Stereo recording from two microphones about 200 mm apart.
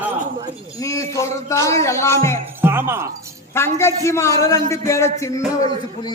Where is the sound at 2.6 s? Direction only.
10° right (ahead or behind).